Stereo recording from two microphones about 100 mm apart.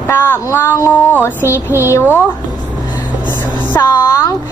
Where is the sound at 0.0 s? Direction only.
25° left (ahead or behind).